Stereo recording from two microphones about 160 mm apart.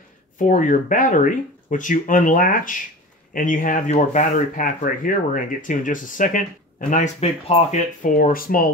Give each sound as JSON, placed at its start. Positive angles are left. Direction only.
{"t": 0.4, "sound": "speech", "side_deg": 55}
{"t": 8.0, "sound": "speech", "side_deg": 55}